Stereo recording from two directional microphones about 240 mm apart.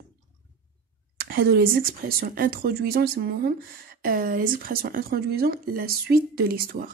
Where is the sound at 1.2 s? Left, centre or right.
Right.